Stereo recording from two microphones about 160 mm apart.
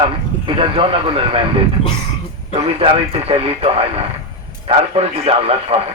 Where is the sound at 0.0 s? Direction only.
35° right (ahead or behind).